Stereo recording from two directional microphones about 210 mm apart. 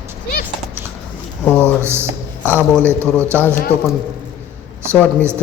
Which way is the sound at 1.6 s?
10° right (ahead or behind).